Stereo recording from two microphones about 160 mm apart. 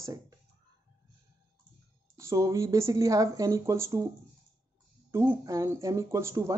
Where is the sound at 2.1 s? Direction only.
20° right (ahead or behind).